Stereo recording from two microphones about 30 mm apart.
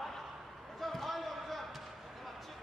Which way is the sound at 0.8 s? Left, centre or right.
Centre.